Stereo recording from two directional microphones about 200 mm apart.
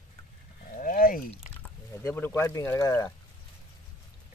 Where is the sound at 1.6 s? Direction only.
10° left (ahead or behind).